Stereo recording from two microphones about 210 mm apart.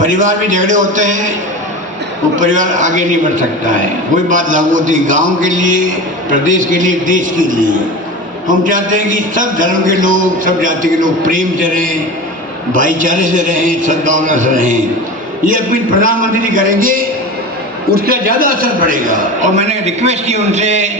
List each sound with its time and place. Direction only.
0.0 s a man's voice: 35° right (ahead or behind)
2.4 s a man's voice: 35° right (ahead or behind)